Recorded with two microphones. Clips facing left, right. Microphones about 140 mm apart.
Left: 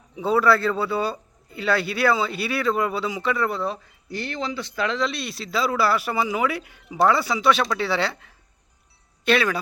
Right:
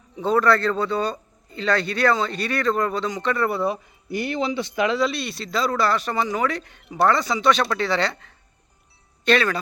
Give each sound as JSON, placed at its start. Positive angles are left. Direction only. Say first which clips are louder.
{"t": 0.2, "sound": "speech", "louder": "even", "side_deg": 5}
{"t": 3.6, "sound": "speech", "louder": "right 4 dB", "side_deg": -15}
{"t": 4.9, "sound": "speech", "louder": "right 3 dB", "side_deg": -5}